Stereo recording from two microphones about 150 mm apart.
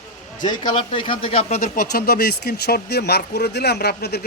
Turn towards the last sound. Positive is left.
turn(degrees=90)